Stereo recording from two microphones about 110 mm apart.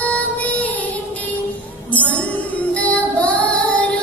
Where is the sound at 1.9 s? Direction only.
15° left (ahead or behind).